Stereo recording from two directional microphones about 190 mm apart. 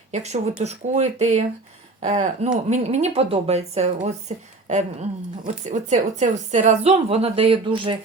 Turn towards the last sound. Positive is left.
turn(degrees=-25)  # may be behind; listen again after turning